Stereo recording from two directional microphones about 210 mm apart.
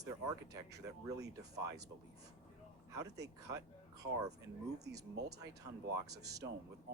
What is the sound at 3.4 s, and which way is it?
Speech, 15° right (ahead or behind).